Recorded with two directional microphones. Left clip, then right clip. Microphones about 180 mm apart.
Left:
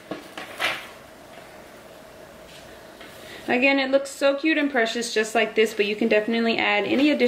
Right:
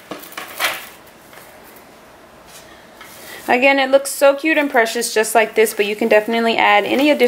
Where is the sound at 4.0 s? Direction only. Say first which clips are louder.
Right 8 dB; 15° left (ahead or behind).